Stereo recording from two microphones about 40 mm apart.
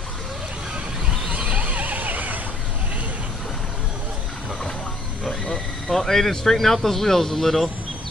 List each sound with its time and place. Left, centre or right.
1.3 s neigh: right
5.9 s speech: centre